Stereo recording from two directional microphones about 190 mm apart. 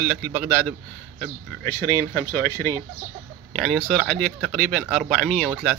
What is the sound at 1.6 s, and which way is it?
Speech, 15° left (ahead or behind).